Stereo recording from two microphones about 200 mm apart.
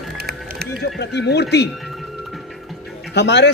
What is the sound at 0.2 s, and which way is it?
Music, 55° right (ahead or behind).